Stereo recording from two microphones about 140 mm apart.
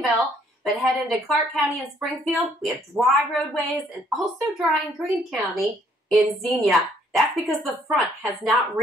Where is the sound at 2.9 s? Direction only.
15° right (ahead or behind).